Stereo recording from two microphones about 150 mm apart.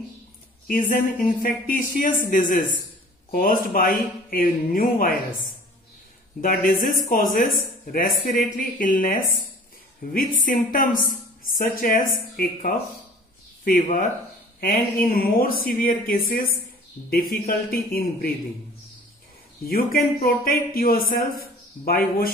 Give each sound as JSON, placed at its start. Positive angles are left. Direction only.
{"t": 0.7, "sound": "speech", "side_deg": 65}
{"t": 6.4, "sound": "speech", "side_deg": 70}
{"t": 10.4, "sound": "speech", "side_deg": 65}
{"t": 14.6, "sound": "speech", "side_deg": 75}
{"t": 19.6, "sound": "speech", "side_deg": 80}